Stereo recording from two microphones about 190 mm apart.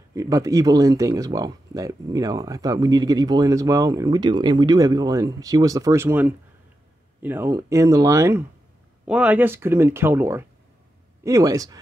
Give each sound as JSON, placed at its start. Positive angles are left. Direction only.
{"t": 0.1, "sound": "speech", "side_deg": -15}